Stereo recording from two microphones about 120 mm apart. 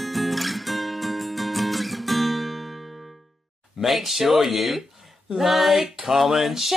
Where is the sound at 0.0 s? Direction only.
Centre (ahead or behind).